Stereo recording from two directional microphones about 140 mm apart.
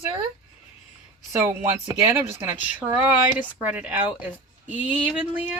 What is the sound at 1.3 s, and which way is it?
Speech, 20° right (ahead or behind).